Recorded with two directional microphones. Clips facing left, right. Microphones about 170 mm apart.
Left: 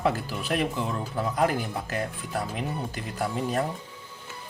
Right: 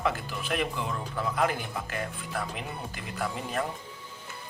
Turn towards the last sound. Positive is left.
turn(degrees=35)  # may be behind; listen again after turning